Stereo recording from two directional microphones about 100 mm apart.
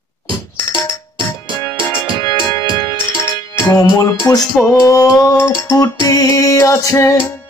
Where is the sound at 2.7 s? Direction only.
45° left (ahead or behind).